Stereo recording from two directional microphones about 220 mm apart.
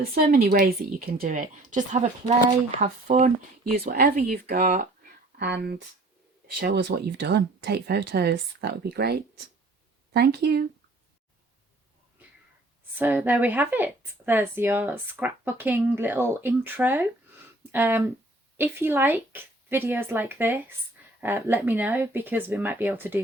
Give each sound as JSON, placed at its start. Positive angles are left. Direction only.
{"t": 0.0, "sound": "speech", "side_deg": -40}
{"t": 13.0, "sound": "speech", "side_deg": -10}